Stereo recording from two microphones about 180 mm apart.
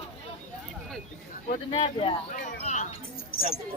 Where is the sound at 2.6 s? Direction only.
40° left (ahead or behind).